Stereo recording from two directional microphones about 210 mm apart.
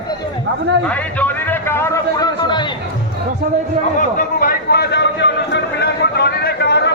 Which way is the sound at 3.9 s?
40° left (ahead or behind).